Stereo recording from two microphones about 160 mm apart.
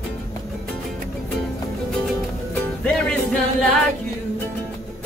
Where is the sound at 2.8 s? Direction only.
5° left (ahead or behind).